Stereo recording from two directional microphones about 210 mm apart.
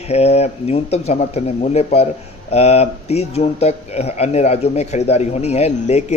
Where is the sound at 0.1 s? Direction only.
30° left (ahead or behind).